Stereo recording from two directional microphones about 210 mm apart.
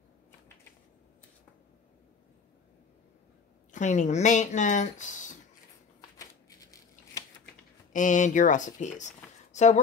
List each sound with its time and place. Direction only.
3.7 s speech: 35° left (ahead or behind)
5.9 s a sound: 15° left (ahead or behind)
7.9 s speech: 35° left (ahead or behind)